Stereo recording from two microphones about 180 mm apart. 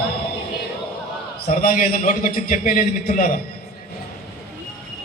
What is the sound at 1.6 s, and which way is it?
A man's voice, 50° left (ahead or behind).